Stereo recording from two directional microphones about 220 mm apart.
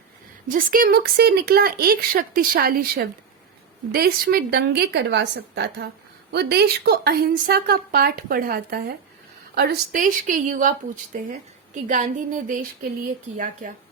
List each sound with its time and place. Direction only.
0.4 s speech: 40° right (ahead or behind)